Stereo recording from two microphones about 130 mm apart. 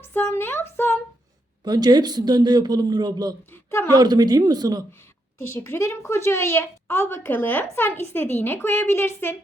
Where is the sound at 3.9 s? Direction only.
30° right (ahead or behind).